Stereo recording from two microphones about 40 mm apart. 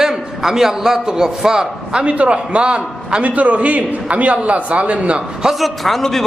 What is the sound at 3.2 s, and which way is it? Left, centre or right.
A man's voice, right.